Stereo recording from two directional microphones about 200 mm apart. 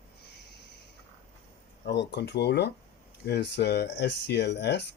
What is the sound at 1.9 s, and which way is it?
Speech, 60° left (ahead or behind).